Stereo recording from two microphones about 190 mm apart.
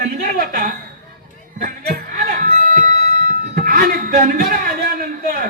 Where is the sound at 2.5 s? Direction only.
45° right (ahead or behind).